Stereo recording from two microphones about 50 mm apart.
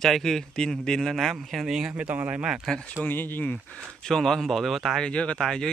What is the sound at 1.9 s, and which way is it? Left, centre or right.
Speech, right.